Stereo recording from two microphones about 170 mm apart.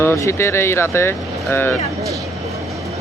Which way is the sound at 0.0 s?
15° left (ahead or behind).